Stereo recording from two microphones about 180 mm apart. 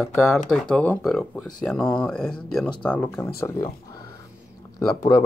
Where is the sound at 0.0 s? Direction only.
Centre (ahead or behind); by 3.7 s 20° left (ahead or behind).